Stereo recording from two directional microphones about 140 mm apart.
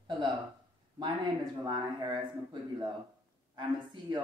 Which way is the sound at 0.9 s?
30° right (ahead or behind).